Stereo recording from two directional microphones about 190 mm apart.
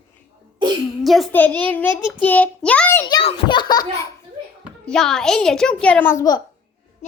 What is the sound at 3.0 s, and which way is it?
A child's voice, 25° left (ahead or behind).